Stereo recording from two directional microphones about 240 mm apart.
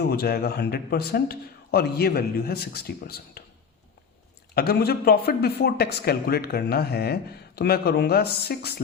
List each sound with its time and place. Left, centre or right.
0.1 s speech: left
4.5 s speech: left